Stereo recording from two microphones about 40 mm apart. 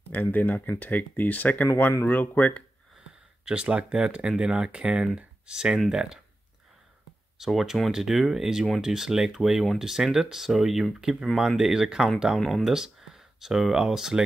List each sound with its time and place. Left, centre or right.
0.1 s speech: left
3.4 s speech: right
7.3 s speech: centre
11.0 s speech: right
12.4 s speech: centre
12.7 s speech: centre